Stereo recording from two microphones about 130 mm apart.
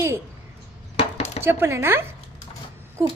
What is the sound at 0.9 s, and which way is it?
Chopping, 50° left (ahead or behind).